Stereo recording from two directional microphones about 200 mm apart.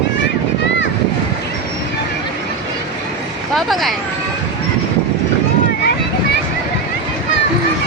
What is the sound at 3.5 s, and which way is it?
Vehicle, centre (ahead or behind).